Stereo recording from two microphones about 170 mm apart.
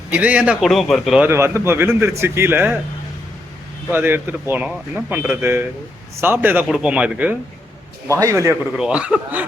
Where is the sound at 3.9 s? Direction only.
10° right (ahead or behind).